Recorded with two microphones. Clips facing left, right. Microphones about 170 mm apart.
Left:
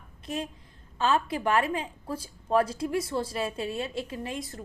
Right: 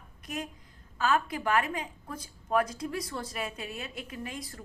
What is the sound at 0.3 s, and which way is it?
A woman's voice, 25° left (ahead or behind).